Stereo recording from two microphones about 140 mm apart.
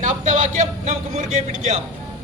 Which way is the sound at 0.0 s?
60° right (ahead or behind).